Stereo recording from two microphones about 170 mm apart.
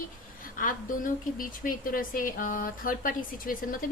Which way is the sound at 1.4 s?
55° left (ahead or behind).